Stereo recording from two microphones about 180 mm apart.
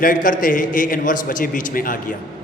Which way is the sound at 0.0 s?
50° left (ahead or behind).